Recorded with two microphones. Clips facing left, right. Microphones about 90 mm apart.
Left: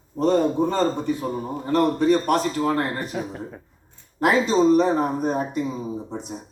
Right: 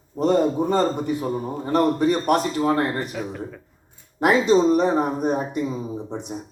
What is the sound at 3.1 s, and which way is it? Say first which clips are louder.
Speech: even; 20° left (ahead or behind).